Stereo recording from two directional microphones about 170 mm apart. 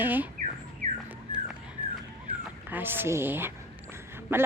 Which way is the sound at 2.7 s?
10° right (ahead or behind).